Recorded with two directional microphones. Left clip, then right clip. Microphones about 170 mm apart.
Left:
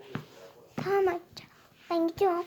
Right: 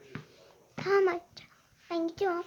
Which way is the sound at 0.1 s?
35° left (ahead or behind).